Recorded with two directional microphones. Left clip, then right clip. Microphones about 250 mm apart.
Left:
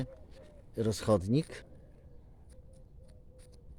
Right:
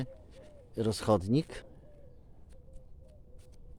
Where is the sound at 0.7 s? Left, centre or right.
Centre.